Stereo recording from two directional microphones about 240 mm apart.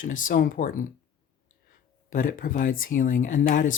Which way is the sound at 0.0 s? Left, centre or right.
Left.